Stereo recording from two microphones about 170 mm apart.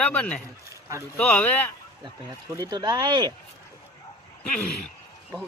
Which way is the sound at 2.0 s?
20° right (ahead or behind).